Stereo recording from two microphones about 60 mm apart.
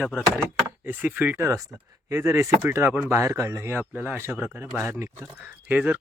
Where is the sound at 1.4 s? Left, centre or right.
Right.